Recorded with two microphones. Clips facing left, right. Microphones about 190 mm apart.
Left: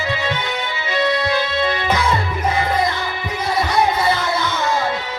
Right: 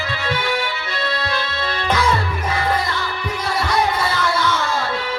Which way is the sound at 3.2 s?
20° left (ahead or behind).